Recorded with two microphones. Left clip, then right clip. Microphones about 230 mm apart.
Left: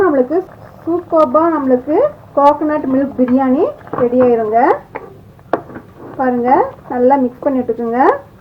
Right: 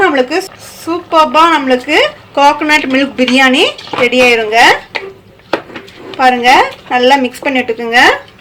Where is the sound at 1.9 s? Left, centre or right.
Right.